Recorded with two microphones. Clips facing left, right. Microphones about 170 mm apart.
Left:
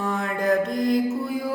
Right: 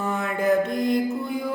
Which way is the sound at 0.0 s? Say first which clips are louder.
Right 1 dB; 5° right (ahead or behind).